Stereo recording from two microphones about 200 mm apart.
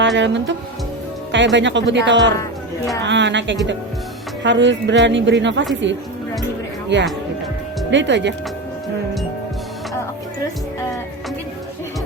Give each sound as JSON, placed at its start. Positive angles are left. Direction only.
{"t": 0.0, "sound": "speech", "side_deg": -65}
{"t": 1.5, "sound": "speech", "side_deg": -65}
{"t": 2.4, "sound": "a sound", "side_deg": 15}
{"t": 3.0, "sound": "speech", "side_deg": -60}